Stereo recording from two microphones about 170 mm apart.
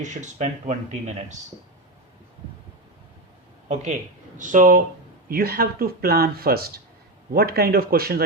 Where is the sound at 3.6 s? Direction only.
45° right (ahead or behind).